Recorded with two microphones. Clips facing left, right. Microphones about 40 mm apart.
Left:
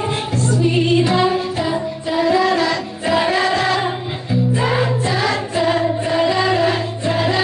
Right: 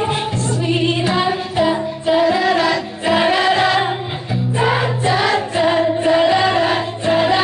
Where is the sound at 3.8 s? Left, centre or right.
Centre.